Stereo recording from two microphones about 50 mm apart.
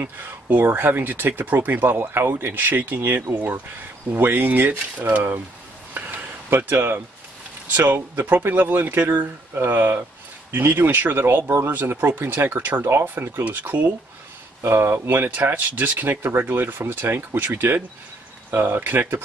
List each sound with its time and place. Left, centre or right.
0.0 s speech: right
5.9 s a sound: right
6.7 s speech: right
12.5 s speech: right
12.8 s speech: right
13.4 s speech: right
14.7 s speech: right
15.0 s speech: right
16.2 s speech: right